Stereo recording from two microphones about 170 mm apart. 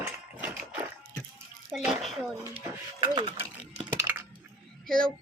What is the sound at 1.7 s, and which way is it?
Child singing, centre (ahead or behind).